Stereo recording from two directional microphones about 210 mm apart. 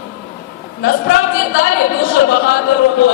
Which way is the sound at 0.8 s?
45° left (ahead or behind).